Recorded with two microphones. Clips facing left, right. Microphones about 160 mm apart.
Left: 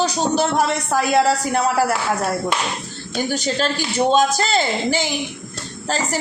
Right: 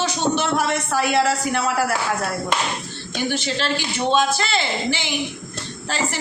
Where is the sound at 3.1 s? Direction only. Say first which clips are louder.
Left 2 dB; 40° left (ahead or behind).